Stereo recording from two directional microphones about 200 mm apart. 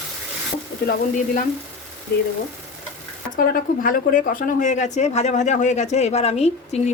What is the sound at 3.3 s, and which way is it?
Speech, 45° left (ahead or behind).